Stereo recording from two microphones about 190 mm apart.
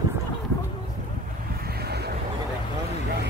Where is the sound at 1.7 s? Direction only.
55° right (ahead or behind).